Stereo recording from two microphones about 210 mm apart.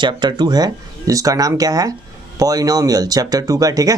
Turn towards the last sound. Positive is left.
turn(degrees=-15)  # may be behind; listen again after turning